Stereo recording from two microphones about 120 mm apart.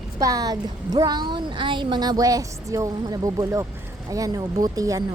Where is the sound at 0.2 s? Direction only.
30° right (ahead or behind).